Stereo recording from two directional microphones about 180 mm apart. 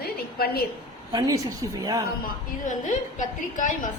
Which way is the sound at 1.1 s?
20° right (ahead or behind).